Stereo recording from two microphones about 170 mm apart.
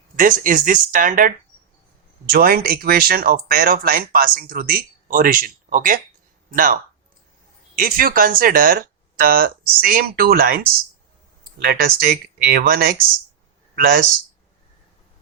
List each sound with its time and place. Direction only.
0.2 s speech: 50° right (ahead or behind)
2.3 s speech: 60° right (ahead or behind)
7.8 s speech: 55° right (ahead or behind)